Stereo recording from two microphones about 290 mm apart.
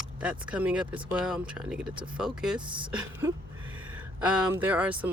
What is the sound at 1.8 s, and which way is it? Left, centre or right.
Speech, centre.